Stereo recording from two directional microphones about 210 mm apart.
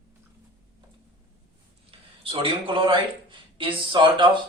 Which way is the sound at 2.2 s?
25° right (ahead or behind).